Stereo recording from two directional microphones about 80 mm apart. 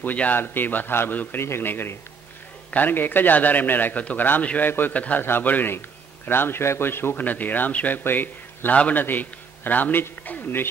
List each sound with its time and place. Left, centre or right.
0.0 s a man's voice: left